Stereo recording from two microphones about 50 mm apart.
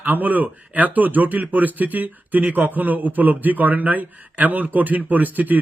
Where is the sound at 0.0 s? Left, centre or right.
Right.